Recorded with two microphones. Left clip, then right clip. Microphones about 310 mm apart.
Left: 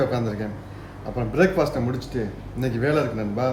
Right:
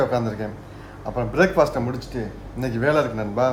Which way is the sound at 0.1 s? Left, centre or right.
Centre.